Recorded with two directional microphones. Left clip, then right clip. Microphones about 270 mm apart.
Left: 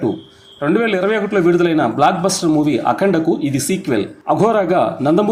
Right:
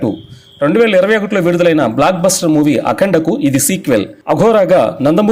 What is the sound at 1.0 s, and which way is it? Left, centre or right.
A man's voice, right.